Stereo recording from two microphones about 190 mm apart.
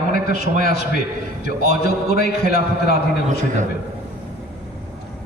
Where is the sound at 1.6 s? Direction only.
55° left (ahead or behind).